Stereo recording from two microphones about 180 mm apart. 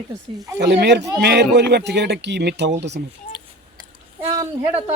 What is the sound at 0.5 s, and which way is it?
Speech, 70° right (ahead or behind).